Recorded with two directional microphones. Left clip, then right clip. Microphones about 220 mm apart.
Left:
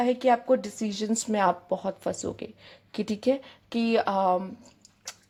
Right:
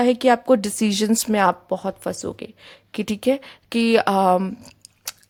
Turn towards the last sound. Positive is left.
turn(degrees=-25)  # may be behind; listen again after turning